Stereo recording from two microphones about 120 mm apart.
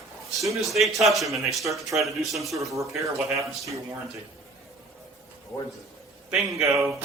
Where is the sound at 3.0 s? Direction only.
25° right (ahead or behind).